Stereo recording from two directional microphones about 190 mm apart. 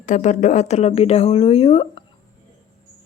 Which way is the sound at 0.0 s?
40° left (ahead or behind).